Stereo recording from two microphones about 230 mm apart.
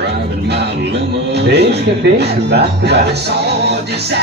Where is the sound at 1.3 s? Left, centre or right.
Right.